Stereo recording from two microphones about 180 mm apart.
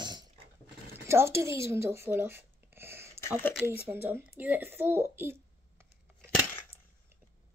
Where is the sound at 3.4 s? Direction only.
5° left (ahead or behind).